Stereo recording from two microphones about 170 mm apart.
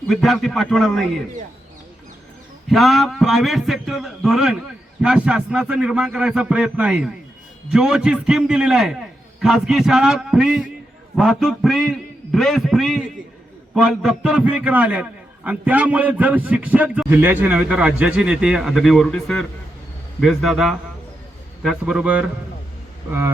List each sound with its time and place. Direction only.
0.1 s a man's voice: centre (ahead or behind)
2.6 s a man's voice: centre (ahead or behind)